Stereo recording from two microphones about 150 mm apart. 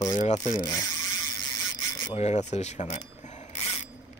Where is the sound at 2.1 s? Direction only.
50° left (ahead or behind).